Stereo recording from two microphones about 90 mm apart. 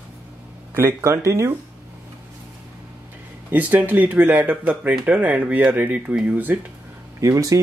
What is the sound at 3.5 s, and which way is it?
Speech, 20° right (ahead or behind).